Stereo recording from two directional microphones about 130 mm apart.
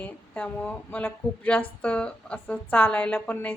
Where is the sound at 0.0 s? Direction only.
10° left (ahead or behind).